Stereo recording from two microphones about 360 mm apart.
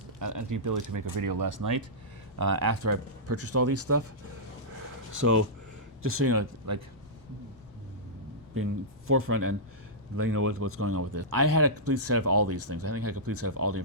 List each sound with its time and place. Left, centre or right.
0.2 s speech: right
5.2 s speech: right
6.0 s speech: right
9.0 s speech: right